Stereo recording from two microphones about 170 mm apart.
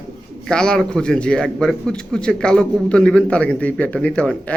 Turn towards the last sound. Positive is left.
turn(degrees=5)  # may be behind; listen again after turning